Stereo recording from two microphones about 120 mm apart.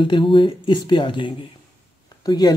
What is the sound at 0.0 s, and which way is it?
Speech, 40° left (ahead or behind).